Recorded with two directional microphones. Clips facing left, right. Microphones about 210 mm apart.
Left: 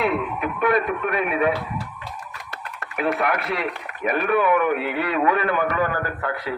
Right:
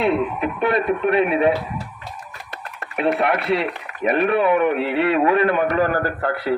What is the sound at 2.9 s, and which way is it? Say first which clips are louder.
A man's voice: right 3 dB; 30° right (ahead or behind).